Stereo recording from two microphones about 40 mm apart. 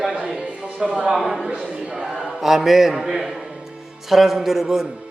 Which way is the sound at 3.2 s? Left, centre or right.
Centre.